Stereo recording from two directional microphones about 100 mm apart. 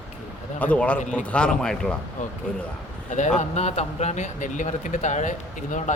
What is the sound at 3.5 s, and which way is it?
Speech, 90° left.